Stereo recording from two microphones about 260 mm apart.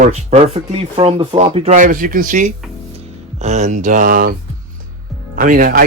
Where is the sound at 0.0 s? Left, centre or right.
Right.